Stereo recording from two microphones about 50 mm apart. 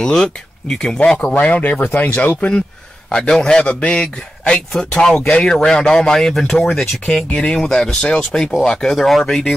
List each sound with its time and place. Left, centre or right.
0.0 s a man's voice: centre
1.4 s speech: left
3.1 s a man's voice: centre